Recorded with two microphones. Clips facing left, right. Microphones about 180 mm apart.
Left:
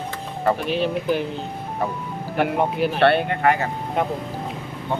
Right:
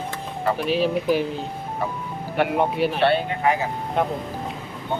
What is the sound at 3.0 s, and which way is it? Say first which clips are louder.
Speech: left 5 dB; 60° left (ahead or behind).